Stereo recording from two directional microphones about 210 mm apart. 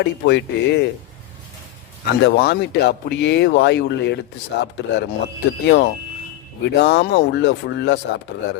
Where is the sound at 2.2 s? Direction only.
55° left (ahead or behind).